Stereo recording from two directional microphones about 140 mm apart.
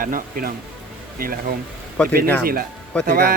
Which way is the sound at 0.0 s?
90° right.